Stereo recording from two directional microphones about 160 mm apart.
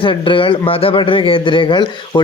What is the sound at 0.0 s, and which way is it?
Speech, 30° left (ahead or behind).